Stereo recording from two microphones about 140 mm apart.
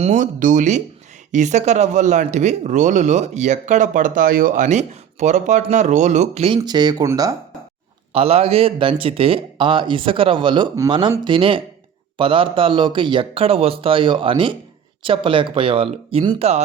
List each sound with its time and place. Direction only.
0.0 s speech: 65° right (ahead or behind); by 6.6 s 45° right (ahead or behind)
6.6 s a man's voice: 30° right (ahead or behind)
8.1 s a man's voice: 45° right (ahead or behind)